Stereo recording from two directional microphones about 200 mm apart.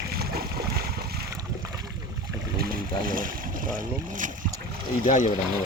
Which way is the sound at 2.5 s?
45° right (ahead or behind).